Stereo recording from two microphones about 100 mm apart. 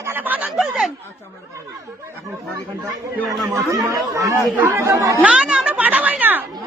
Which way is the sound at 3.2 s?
30° right (ahead or behind).